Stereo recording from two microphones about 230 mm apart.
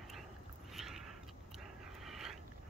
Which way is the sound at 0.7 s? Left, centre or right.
Centre.